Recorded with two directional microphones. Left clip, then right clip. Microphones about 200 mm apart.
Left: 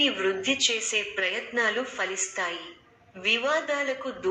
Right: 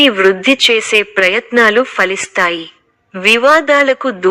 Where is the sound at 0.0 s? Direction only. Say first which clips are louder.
Right 16 dB; 45° right (ahead or behind).